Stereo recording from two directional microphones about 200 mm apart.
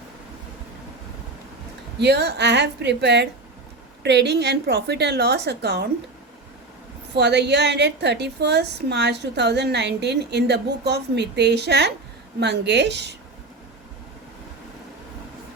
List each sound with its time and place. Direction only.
2.0 s a woman's voice: 55° right (ahead or behind)
7.2 s a woman's voice: 55° right (ahead or behind)